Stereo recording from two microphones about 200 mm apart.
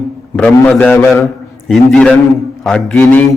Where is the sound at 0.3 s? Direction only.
5° left (ahead or behind).